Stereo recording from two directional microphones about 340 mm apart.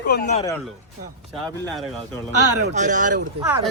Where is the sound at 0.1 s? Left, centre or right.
Left.